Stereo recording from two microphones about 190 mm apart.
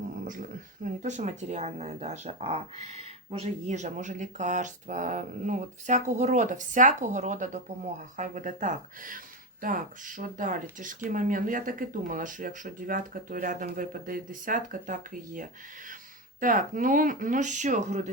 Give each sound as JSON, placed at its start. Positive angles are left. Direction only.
{"t": 0.1, "sound": "speech", "side_deg": -45}